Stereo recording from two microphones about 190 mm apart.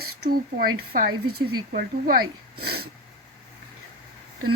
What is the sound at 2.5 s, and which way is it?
Wheeze, 55° right (ahead or behind).